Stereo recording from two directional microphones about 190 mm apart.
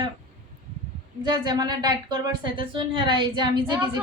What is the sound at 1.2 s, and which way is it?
A woman's voice, 20° right (ahead or behind).